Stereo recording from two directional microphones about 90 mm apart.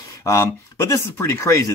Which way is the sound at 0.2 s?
35° left (ahead or behind).